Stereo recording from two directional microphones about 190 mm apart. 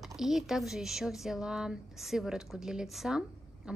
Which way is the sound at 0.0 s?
Centre (ahead or behind).